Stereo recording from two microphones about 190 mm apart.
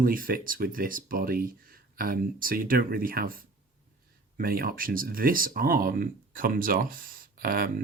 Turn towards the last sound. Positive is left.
turn(degrees=-50)  # may be behind; listen again after turning